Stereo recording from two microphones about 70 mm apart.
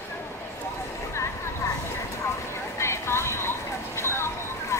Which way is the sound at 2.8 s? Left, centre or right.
Left.